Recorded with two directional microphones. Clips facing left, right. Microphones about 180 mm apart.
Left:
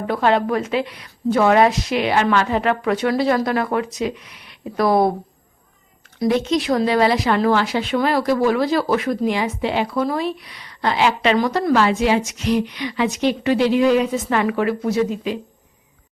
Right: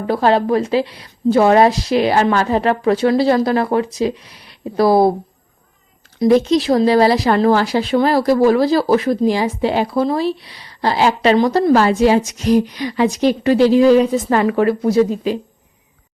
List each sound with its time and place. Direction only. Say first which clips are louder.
0.1 s speech: right 4 dB; 35° right (ahead or behind)
6.2 s speech: right 6 dB; 35° right (ahead or behind)